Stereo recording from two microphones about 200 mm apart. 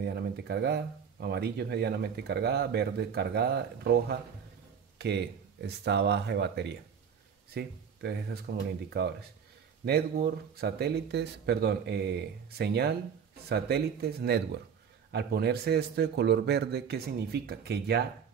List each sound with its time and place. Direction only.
0.0 s speech: 55° right (ahead or behind)